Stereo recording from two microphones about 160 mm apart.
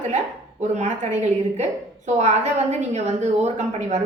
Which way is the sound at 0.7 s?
45° right (ahead or behind).